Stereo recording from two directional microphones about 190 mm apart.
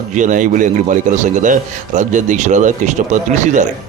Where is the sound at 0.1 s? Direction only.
40° right (ahead or behind).